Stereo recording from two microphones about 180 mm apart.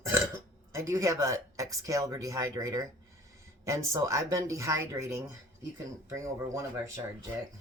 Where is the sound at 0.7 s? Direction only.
15° right (ahead or behind).